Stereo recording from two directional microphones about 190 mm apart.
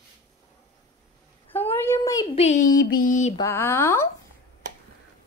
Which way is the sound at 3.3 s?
15° left (ahead or behind).